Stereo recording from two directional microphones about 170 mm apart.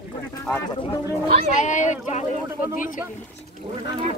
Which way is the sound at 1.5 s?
45° left (ahead or behind).